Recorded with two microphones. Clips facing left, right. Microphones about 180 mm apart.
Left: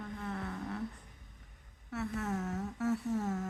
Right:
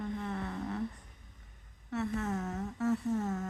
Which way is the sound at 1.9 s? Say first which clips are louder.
Right 2 dB; 5° left (ahead or behind).